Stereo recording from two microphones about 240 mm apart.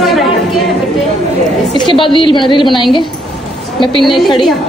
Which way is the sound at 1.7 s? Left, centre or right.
Left.